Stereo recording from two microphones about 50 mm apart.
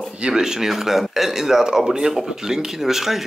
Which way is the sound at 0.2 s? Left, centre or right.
Centre.